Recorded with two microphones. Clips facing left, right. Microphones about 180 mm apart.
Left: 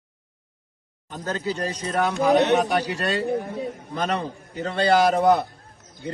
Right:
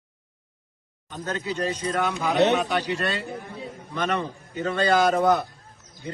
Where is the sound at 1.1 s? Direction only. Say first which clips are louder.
Left 2 dB; 35° left (ahead or behind).